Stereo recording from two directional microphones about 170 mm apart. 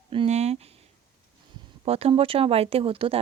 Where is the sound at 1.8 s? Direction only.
35° right (ahead or behind).